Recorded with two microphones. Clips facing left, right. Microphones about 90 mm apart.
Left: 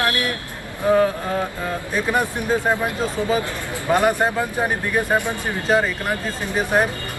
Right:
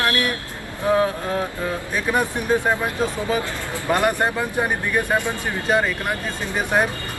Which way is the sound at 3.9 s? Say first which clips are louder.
Left 2 dB; 5° left (ahead or behind).